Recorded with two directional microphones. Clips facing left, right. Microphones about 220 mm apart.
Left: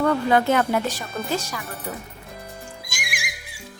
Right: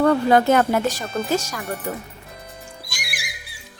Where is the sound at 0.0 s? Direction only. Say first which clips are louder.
Right 3 dB; 45° right (ahead or behind).